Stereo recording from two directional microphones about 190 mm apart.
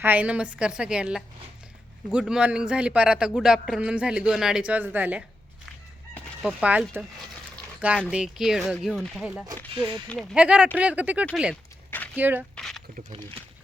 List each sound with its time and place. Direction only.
0.0 s speech: 10° right (ahead or behind)
6.4 s speech: 5° right (ahead or behind)
8.1 s speech: 5° right (ahead or behind)
9.7 s speech: 25° right (ahead or behind)
10.3 s speech: 5° right (ahead or behind)
12.5 s a sound: centre (ahead or behind)